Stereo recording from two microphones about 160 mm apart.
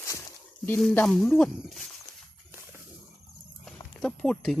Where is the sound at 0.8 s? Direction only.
5° left (ahead or behind).